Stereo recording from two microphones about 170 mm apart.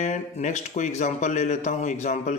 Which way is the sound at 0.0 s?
40° left (ahead or behind).